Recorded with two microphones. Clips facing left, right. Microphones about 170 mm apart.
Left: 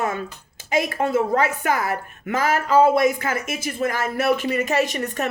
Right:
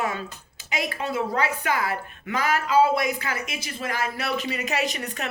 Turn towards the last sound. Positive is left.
turn(degrees=50)  # may be behind; listen again after turning